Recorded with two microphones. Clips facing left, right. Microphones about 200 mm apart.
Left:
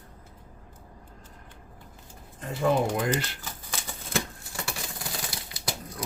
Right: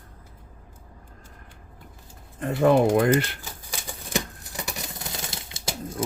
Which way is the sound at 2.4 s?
60° right (ahead or behind).